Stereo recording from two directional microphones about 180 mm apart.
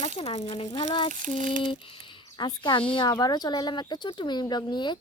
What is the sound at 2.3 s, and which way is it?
Speech, 25° left (ahead or behind).